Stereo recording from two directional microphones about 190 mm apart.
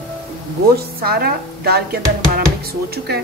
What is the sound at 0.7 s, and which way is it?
A woman's voice, 55° right (ahead or behind).